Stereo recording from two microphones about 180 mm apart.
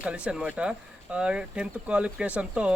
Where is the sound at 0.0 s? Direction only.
5° right (ahead or behind).